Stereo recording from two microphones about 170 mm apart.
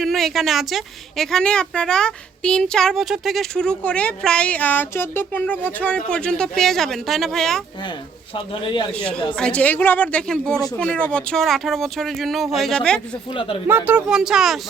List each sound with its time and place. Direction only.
0.0 s a woman's voice: centre (ahead or behind)
8.4 s speech: 30° left (ahead or behind)
8.9 s a woman's voice: 5° left (ahead or behind)
13.3 s speech: 30° left (ahead or behind)
13.7 s a woman's voice: 10° right (ahead or behind)